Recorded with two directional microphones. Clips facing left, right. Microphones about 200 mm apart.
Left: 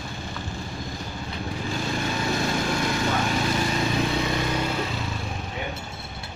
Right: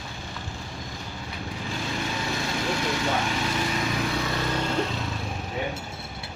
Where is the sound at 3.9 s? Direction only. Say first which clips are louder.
Left 3 dB; 20° left (ahead or behind); by 5.1 s 5° left (ahead or behind).